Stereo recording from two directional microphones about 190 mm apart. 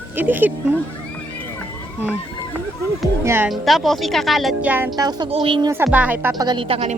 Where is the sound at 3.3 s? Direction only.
10° right (ahead or behind).